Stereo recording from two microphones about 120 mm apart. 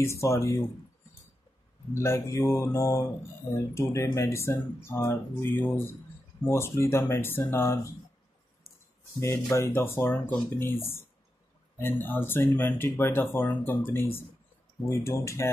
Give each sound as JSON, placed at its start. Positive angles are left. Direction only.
{"t": 0.0, "sound": "speech", "side_deg": 25}
{"t": 2.0, "sound": "speech", "side_deg": 25}
{"t": 9.2, "sound": "speech", "side_deg": 25}